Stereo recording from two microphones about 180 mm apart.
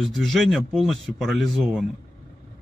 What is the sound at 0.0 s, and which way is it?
Speech, centre (ahead or behind).